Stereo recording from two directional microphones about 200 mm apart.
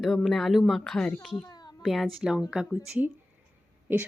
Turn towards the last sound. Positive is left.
turn(degrees=-10)  # may be behind; listen again after turning